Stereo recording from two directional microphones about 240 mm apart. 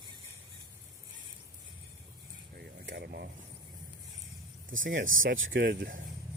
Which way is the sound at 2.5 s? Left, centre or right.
Right.